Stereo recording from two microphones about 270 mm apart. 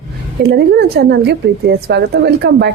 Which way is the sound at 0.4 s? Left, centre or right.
Right.